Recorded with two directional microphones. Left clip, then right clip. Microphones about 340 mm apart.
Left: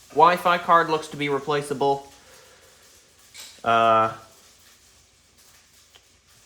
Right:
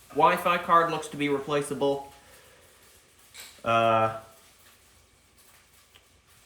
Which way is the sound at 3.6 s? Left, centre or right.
Left.